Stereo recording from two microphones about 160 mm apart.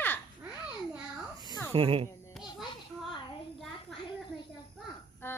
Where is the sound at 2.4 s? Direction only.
Centre (ahead or behind).